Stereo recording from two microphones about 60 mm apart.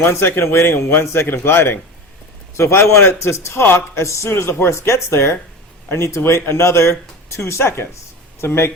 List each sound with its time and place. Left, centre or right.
0.0 s speech: left
2.6 s speech: left